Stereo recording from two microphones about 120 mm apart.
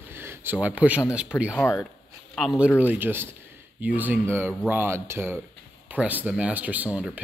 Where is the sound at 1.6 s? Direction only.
15° left (ahead or behind).